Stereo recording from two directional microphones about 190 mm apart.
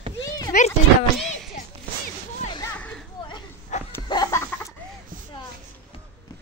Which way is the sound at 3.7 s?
40° left (ahead or behind).